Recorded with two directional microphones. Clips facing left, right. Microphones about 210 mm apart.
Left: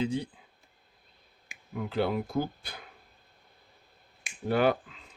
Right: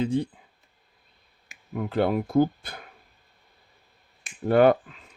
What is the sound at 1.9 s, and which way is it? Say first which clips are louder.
Speech: right 6 dB; 55° right (ahead or behind).